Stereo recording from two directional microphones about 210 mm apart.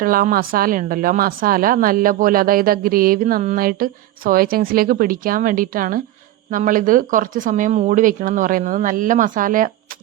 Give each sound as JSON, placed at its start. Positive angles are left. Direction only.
{"t": 0.0, "sound": "a woman's voice", "side_deg": -40}